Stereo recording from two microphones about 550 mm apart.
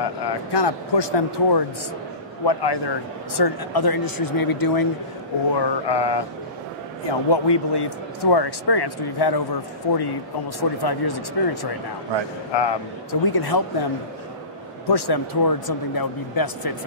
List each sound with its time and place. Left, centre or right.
0.2 s a man's voice: left
14.9 s speech: left